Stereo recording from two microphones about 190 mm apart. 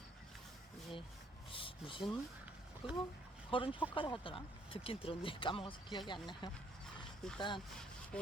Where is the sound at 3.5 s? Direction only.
25° left (ahead or behind).